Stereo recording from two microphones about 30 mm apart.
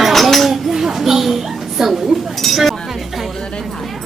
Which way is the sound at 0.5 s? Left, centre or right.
Centre.